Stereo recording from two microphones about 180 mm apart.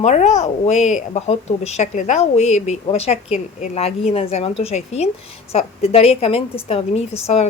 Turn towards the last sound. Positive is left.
turn(degrees=35)  # may be behind; listen again after turning